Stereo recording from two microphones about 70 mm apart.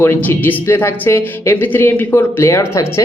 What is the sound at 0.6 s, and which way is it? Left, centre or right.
Speech, left.